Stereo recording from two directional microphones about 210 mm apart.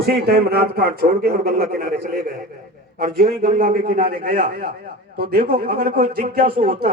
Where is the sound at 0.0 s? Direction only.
45° right (ahead or behind).